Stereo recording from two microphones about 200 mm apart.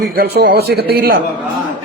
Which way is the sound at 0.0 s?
50° right (ahead or behind).